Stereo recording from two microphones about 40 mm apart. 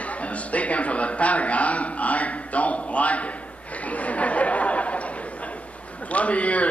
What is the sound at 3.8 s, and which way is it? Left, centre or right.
Chatter, left.